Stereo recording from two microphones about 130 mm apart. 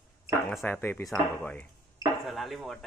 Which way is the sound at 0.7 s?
15° left (ahead or behind).